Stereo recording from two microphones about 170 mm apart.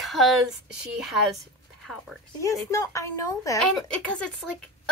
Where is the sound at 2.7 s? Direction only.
20° left (ahead or behind).